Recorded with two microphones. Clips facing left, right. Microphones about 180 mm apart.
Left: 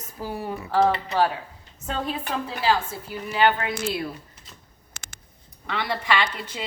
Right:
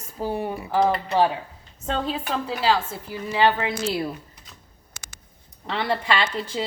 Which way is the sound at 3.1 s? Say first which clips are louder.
Right 1 dB; 25° right (ahead or behind).